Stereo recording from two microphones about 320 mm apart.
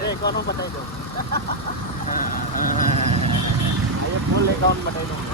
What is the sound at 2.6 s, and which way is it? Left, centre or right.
Vehicle, left.